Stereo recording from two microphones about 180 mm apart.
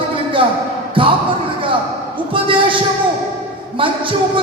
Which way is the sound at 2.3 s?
30° right (ahead or behind).